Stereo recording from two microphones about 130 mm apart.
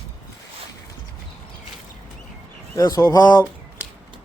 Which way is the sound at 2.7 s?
25° left (ahead or behind).